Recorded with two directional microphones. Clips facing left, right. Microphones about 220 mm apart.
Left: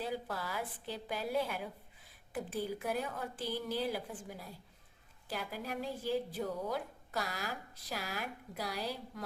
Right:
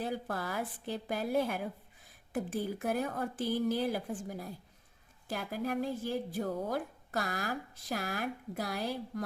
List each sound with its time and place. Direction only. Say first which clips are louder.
0.0 s speech: right 3 dB; 50° right (ahead or behind)